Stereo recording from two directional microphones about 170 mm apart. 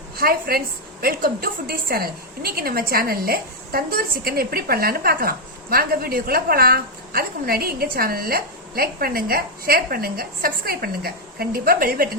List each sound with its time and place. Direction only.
0.2 s a woman's voice: 60° right (ahead or behind)